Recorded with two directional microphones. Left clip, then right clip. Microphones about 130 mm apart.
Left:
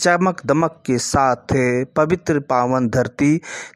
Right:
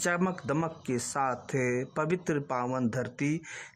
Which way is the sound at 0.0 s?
35° left (ahead or behind).